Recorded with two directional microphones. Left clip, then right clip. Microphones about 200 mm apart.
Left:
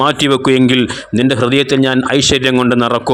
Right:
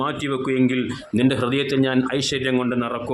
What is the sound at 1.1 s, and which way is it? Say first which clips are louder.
A man's voice: left 8 dB; 30° left (ahead or behind).